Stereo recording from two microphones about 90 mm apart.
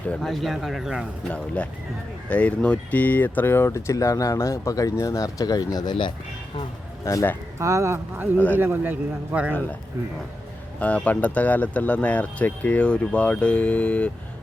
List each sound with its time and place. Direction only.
0.2 s speech: centre (ahead or behind)
1.2 s speech: 15° left (ahead or behind); by 6.1 s 55° left (ahead or behind)
7.0 s speech: 35° left (ahead or behind)
7.6 s speech: 35° right (ahead or behind)
8.5 s speech: 20° right (ahead or behind)
10.8 s speech: 15° left (ahead or behind)